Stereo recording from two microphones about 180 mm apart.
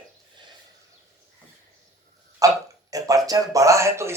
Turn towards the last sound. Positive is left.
turn(degrees=-15)  # may be behind; listen again after turning